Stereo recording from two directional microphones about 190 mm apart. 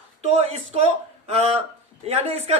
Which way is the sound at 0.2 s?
35° right (ahead or behind).